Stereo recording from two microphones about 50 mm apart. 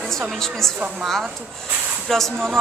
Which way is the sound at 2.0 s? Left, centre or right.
Centre.